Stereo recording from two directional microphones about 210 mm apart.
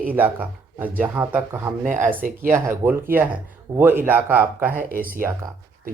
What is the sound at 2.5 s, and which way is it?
Speech, 10° right (ahead or behind).